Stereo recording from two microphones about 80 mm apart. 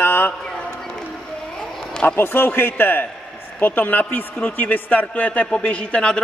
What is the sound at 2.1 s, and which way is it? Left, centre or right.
A man's voice, left.